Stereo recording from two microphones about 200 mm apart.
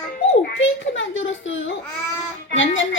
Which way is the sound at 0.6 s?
70° left (ahead or behind).